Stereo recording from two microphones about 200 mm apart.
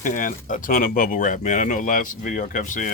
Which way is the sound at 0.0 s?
40° left (ahead or behind).